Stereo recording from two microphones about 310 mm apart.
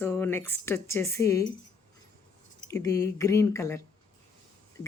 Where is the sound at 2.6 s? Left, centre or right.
Centre.